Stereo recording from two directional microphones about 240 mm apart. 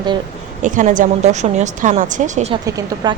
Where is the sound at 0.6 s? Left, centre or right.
Right.